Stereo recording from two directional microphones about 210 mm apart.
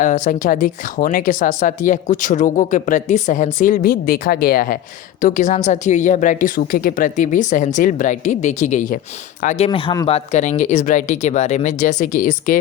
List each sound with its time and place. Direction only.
0.0 s speech: 40° left (ahead or behind)
9.6 s speech: 25° left (ahead or behind)
10.1 s speech: 30° left (ahead or behind)